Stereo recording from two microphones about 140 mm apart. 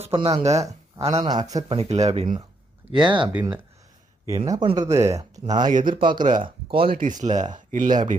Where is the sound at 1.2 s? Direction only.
30° right (ahead or behind).